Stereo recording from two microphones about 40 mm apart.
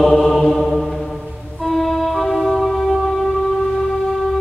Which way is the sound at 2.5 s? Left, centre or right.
Centre.